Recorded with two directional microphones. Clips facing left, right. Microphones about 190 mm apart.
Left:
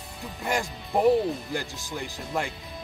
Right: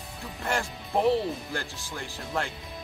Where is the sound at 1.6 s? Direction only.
15° left (ahead or behind).